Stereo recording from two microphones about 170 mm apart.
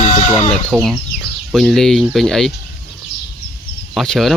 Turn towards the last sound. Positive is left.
turn(degrees=0)  # may be behind; listen again after turning